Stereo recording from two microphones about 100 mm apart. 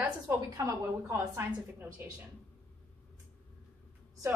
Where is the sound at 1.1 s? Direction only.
20° right (ahead or behind).